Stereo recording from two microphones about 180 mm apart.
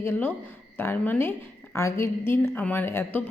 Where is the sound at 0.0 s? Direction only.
10° left (ahead or behind).